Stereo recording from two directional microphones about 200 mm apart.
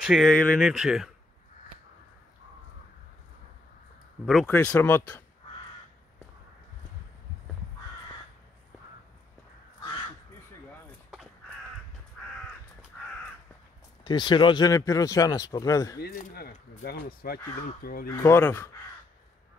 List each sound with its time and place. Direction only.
0.0 s speech: centre (ahead or behind)
4.5 s speech: 5° left (ahead or behind)
12.2 s crow: 5° left (ahead or behind)
14.0 s speech: 25° left (ahead or behind)
16.0 s speech: 50° left (ahead or behind)
18.0 s speech: 15° left (ahead or behind)